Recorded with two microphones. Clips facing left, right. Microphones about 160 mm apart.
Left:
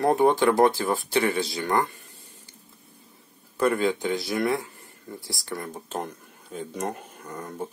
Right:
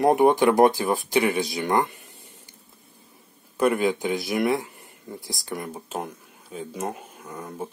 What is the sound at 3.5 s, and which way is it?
Speech, 15° right (ahead or behind).